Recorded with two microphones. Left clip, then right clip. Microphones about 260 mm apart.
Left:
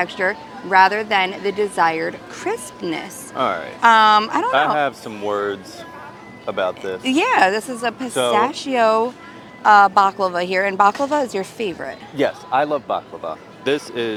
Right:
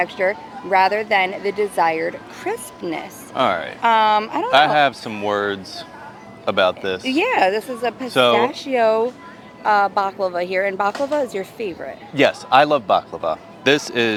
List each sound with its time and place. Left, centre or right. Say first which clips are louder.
0.0 s a woman's voice: right 1 dB; centre
3.3 s speech: right 2 dB; right
3.8 s speech: left 4 dB; left
4.5 s speech: right 6 dB; right
7.2 s speech: left 2 dB; left
12.1 s a man's voice: right 5 dB; right